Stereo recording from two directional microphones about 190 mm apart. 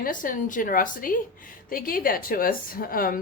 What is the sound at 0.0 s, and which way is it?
A woman's voice, 45° left (ahead or behind).